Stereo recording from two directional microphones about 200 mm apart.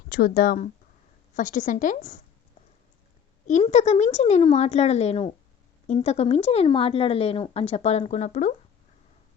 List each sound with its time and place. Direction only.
0.1 s a woman's voice: 50° left (ahead or behind)
3.6 s a woman's voice: 35° left (ahead or behind)